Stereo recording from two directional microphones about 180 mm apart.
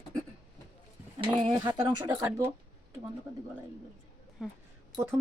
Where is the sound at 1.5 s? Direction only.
20° right (ahead or behind).